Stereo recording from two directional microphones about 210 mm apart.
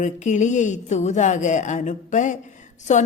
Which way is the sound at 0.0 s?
35° left (ahead or behind).